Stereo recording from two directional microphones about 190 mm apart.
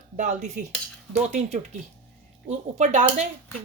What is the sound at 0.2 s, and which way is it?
Speech, 40° right (ahead or behind).